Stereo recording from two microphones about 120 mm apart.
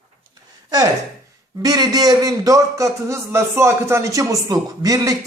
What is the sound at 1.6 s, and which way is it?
A man's voice, 30° right (ahead or behind).